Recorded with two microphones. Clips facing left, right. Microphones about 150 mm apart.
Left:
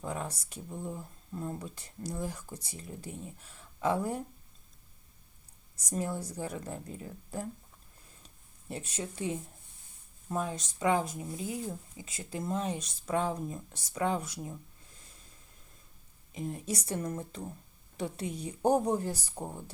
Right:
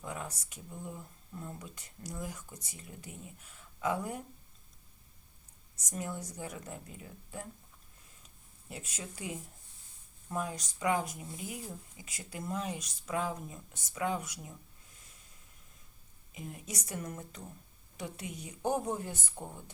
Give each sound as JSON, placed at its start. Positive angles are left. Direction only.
{"t": 0.0, "sound": "speech", "side_deg": 35}
{"t": 5.7, "sound": "speech", "side_deg": 30}
{"t": 8.7, "sound": "speech", "side_deg": 30}
{"t": 16.3, "sound": "speech", "side_deg": 35}